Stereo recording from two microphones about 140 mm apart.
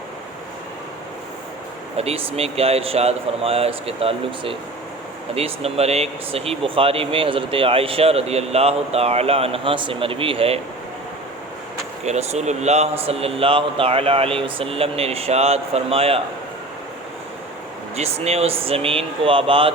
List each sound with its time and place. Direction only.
2.0 s speech: 45° right (ahead or behind)
12.0 s speech: 55° right (ahead or behind)
17.9 s speech: 50° right (ahead or behind)